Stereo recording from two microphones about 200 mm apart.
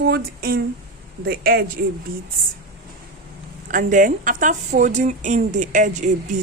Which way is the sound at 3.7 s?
40° right (ahead or behind).